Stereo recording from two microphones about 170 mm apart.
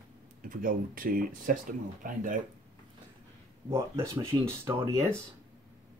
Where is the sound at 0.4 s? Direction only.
55° right (ahead or behind).